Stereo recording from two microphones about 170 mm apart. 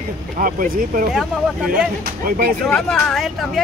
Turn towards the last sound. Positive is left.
turn(degrees=0)  # may be behind; listen again after turning